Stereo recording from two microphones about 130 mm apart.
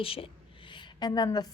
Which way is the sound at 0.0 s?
45° left (ahead or behind).